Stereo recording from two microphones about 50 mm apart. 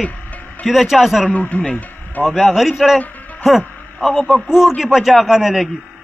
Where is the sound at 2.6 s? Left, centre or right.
Centre.